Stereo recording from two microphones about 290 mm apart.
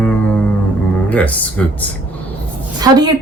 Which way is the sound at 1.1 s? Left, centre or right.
Centre.